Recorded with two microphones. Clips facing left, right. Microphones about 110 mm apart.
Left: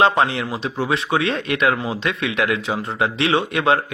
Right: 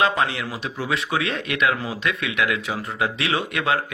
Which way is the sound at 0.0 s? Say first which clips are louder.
Left 5 dB; 30° left (ahead or behind).